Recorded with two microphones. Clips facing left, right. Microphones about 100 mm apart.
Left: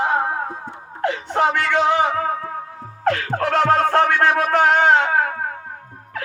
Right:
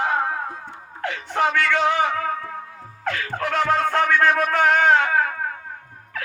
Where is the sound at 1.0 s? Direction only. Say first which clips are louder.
Left 3 dB; 30° left (ahead or behind).